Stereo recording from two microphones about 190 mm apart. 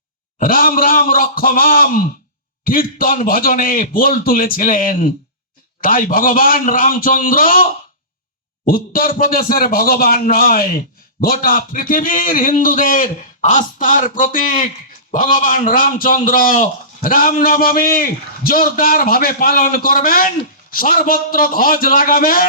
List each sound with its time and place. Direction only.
0.3 s a man's voice: 45° left (ahead or behind)